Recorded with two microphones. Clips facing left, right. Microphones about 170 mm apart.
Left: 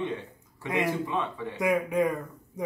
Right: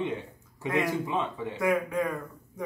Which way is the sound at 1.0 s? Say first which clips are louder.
Even; 15° right (ahead or behind).